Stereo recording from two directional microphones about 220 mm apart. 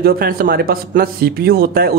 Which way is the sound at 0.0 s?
45° right (ahead or behind).